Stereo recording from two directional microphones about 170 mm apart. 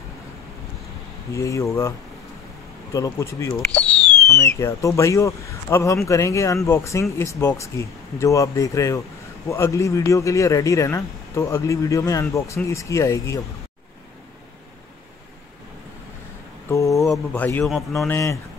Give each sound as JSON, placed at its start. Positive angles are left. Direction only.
{"t": 1.3, "sound": "speech", "side_deg": 20}
{"t": 16.6, "sound": "a sound", "side_deg": 20}
{"t": 17.0, "sound": "a man's voice", "side_deg": 5}
{"t": 18.1, "sound": "speech", "side_deg": 15}